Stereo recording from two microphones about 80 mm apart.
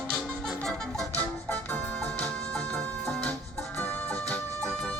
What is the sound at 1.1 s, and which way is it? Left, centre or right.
Music, left.